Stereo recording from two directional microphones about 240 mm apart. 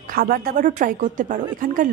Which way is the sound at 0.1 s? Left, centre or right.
Right.